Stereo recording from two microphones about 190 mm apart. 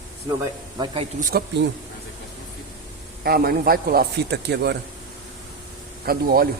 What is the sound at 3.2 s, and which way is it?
Speech, 55° right (ahead or behind).